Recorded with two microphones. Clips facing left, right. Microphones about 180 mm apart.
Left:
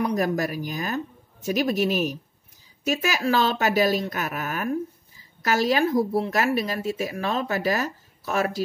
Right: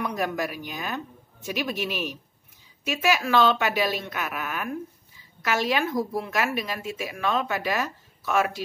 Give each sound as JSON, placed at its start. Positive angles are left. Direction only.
{"t": 0.0, "sound": "speech", "side_deg": 40}